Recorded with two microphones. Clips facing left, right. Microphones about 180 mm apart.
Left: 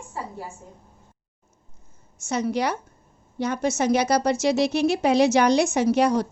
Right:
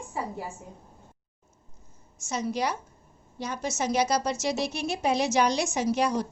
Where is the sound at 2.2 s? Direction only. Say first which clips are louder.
Left 5 dB; 65° left (ahead or behind).